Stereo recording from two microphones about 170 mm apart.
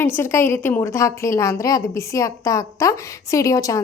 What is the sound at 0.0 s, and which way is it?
A woman's voice, 15° left (ahead or behind).